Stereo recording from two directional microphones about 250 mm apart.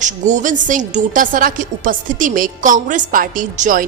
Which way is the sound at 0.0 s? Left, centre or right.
Right.